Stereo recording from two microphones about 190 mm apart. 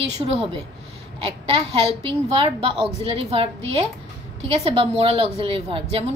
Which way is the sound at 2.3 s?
30° right (ahead or behind).